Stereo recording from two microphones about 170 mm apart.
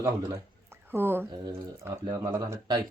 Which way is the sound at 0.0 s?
20° right (ahead or behind).